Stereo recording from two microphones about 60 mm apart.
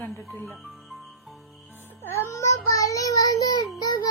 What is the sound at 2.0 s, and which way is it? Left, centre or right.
Child singing, left.